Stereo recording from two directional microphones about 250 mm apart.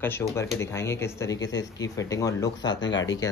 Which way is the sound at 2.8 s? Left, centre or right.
Left.